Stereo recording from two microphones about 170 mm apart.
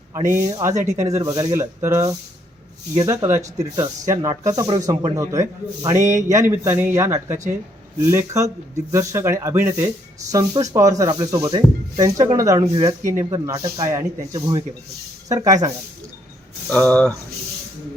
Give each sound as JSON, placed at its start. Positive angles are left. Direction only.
{"t": 0.1, "sound": "speech", "side_deg": -20}
{"t": 16.6, "sound": "speech", "side_deg": 10}